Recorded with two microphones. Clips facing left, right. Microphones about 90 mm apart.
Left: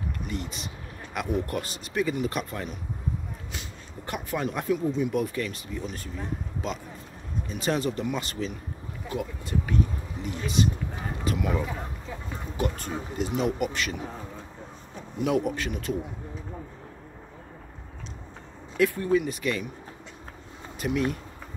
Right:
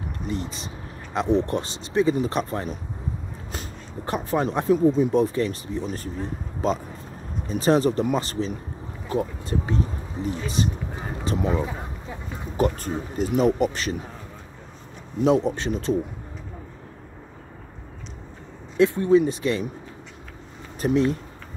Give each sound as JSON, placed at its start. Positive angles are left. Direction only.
{"t": 0.2, "sound": "speech", "side_deg": -30}
{"t": 12.5, "sound": "speech", "side_deg": -40}
{"t": 15.2, "sound": "speech", "side_deg": -30}
{"t": 18.8, "sound": "speech", "side_deg": -25}
{"t": 20.8, "sound": "speech", "side_deg": -30}